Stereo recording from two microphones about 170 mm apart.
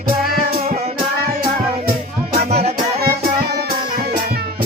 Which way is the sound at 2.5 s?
40° right (ahead or behind).